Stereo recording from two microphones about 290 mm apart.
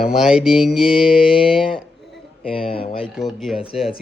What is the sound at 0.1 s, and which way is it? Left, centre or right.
Speech, centre.